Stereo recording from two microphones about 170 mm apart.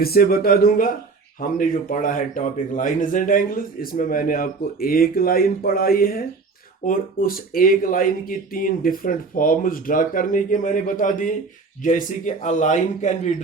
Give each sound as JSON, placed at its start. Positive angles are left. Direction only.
{"t": 0.0, "sound": "a man's voice", "side_deg": 60}